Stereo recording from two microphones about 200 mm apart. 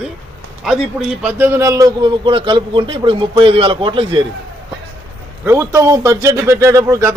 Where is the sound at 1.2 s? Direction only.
10° right (ahead or behind).